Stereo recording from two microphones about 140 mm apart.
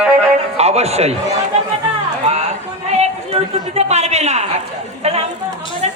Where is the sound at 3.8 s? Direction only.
50° right (ahead or behind).